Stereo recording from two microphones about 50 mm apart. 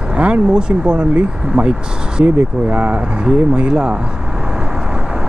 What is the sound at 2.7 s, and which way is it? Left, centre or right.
Speech, right.